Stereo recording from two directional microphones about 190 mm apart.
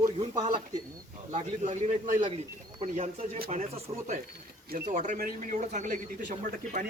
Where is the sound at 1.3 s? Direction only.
40° right (ahead or behind).